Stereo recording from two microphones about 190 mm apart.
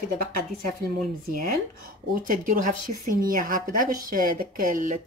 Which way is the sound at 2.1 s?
45° right (ahead or behind).